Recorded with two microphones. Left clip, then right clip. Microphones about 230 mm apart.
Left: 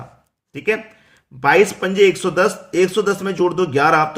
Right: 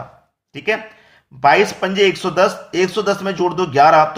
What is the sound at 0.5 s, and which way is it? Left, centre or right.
Speech, left.